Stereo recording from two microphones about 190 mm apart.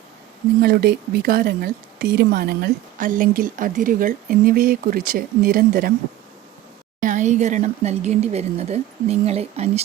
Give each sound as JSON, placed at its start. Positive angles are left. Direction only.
{"t": 0.6, "sound": "a woman's voice", "side_deg": -55}
{"t": 7.0, "sound": "speech", "side_deg": -40}